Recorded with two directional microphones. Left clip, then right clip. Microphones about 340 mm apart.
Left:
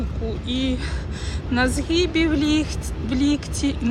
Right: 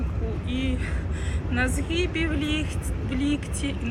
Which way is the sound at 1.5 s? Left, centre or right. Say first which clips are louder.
Left 6 dB; centre.